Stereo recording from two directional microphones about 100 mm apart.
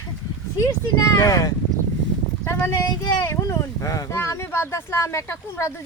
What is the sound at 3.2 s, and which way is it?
Speech, 25° left (ahead or behind).